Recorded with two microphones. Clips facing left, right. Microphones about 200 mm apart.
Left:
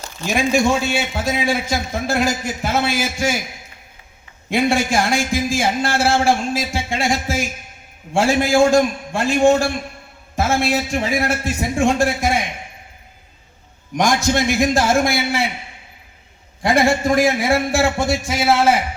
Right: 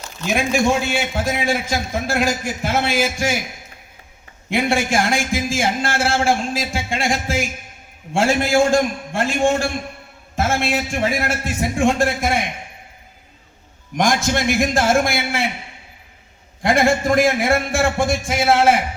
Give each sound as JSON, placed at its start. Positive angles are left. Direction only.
{"t": 0.3, "sound": "a man's voice", "side_deg": -55}
{"t": 4.5, "sound": "a man's voice", "side_deg": -55}
{"t": 13.9, "sound": "a man's voice", "side_deg": -50}
{"t": 16.6, "sound": "a man's voice", "side_deg": -50}